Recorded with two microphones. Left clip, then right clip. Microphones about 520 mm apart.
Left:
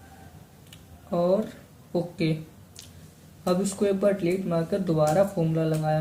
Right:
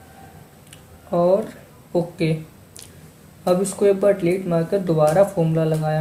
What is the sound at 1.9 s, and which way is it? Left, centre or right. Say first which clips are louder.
Speech: right 6 dB; left.